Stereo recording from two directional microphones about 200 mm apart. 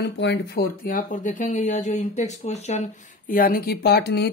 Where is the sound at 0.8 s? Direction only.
40° left (ahead or behind).